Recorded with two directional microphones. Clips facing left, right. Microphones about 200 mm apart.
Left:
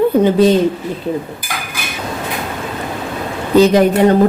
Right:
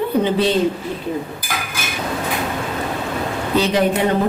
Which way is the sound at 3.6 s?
45° left (ahead or behind).